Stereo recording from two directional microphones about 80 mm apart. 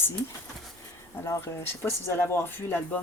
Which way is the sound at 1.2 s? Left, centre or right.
Left.